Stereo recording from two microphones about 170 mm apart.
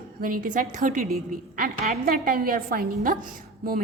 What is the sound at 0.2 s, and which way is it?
A woman's voice, 55° right (ahead or behind).